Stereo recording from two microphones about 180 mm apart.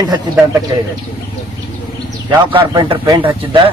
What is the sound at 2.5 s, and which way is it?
Speech, 30° right (ahead or behind).